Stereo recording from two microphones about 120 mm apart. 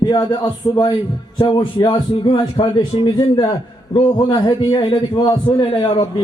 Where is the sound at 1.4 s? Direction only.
40° left (ahead or behind).